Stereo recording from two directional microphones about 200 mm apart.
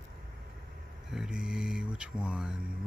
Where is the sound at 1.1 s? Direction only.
5° right (ahead or behind).